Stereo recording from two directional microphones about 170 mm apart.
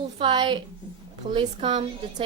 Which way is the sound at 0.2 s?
30° right (ahead or behind).